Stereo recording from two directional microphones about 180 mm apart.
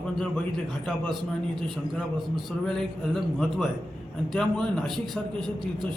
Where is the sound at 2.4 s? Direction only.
Centre (ahead or behind).